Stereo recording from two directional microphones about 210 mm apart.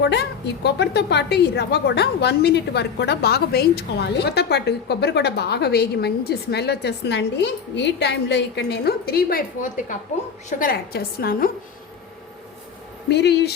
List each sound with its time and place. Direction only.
0.0 s a woman's voice: 50° left (ahead or behind)
13.1 s a woman's voice: 55° left (ahead or behind)